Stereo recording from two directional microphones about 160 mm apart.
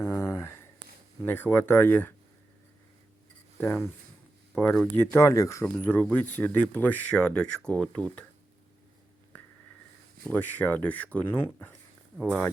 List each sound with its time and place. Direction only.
0.0 s a sound: 15° left (ahead or behind)
1.2 s speech: 10° left (ahead or behind)
3.6 s speech: 10° left (ahead or behind)
5.1 s speech: 20° left (ahead or behind)
10.2 s speech: 10° left (ahead or behind)